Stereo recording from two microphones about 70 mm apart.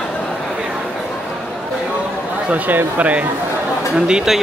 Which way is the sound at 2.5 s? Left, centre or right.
Right.